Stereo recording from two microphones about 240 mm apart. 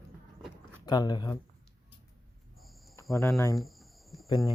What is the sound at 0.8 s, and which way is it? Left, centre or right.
Speech, centre.